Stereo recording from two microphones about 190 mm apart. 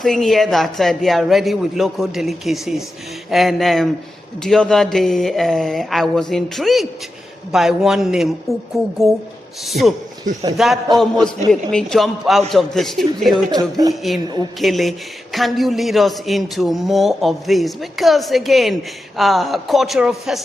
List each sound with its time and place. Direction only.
0.0 s a man's voice: centre (ahead or behind)
13.3 s speech: 20° right (ahead or behind)
14.6 s a man's voice: centre (ahead or behind)